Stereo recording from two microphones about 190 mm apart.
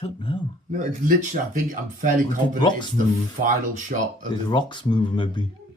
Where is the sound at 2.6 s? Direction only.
25° left (ahead or behind).